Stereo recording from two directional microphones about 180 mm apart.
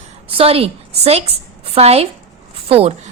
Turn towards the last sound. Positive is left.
turn(degrees=-35)  # may be behind; listen again after turning